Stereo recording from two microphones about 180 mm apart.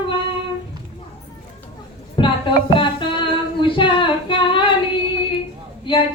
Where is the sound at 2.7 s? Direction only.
25° left (ahead or behind).